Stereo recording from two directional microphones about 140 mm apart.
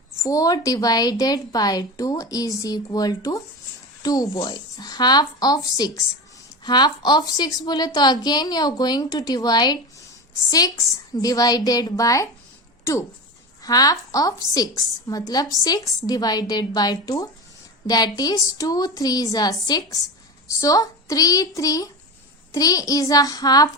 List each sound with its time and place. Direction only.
0.2 s a woman's voice: 25° left (ahead or behind)